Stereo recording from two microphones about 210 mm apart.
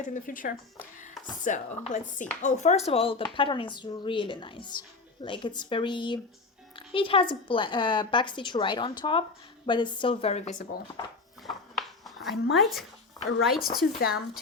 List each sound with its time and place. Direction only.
0.0 s a woman's voice: 40° left (ahead or behind)
11.4 s a sound: centre (ahead or behind)
13.6 s speech: 45° left (ahead or behind)